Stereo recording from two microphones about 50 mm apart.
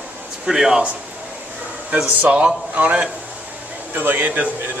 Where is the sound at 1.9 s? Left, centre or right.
Right.